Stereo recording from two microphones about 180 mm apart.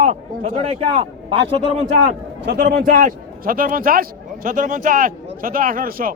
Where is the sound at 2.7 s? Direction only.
45° right (ahead or behind).